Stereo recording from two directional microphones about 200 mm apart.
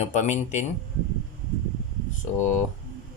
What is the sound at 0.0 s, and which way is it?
Speech, 35° left (ahead or behind).